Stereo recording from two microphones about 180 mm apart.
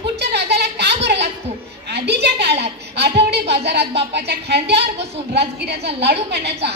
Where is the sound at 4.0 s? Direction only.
65° right (ahead or behind).